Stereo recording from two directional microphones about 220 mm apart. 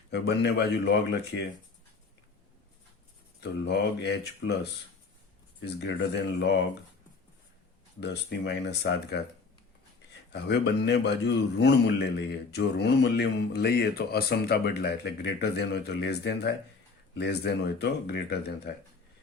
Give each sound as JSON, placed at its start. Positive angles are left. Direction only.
{"t": 0.1, "sound": "a man's voice", "side_deg": 50}
{"t": 3.6, "sound": "a man's voice", "side_deg": 50}
{"t": 8.0, "sound": "a man's voice", "side_deg": 50}
{"t": 10.3, "sound": "a man's voice", "side_deg": 50}